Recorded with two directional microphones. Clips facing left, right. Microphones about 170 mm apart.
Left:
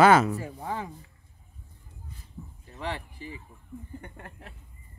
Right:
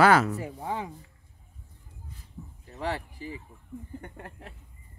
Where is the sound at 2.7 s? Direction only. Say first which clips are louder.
Right 3 dB; 40° right (ahead or behind).